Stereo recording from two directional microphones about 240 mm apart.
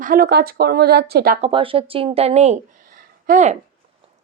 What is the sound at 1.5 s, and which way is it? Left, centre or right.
Speech, right.